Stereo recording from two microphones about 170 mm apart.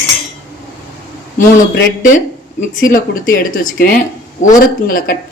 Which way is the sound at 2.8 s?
55° left (ahead or behind).